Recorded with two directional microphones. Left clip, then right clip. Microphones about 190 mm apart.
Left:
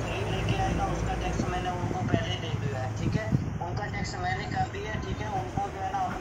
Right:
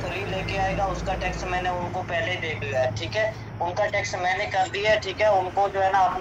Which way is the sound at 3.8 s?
25° right (ahead or behind).